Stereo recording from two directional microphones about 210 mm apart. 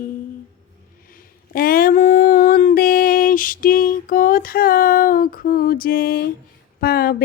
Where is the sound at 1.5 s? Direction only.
45° left (ahead or behind).